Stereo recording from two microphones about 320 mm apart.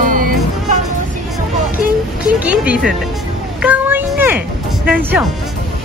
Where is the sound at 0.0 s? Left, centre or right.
Right.